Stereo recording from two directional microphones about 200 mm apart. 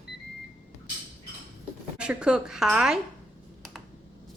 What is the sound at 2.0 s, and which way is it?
A woman's voice, 5° right (ahead or behind).